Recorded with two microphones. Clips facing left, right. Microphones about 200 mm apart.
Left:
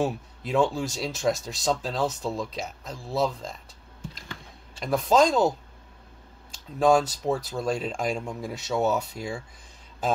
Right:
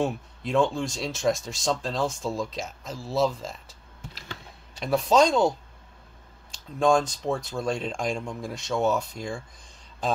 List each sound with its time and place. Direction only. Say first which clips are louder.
0.0 s speech: even; 5° left (ahead or behind)
4.7 s speech: even; centre (ahead or behind)
6.5 s speech: left 1 dB; 5° left (ahead or behind)